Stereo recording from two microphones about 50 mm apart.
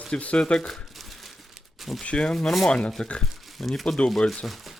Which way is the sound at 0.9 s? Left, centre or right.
Centre.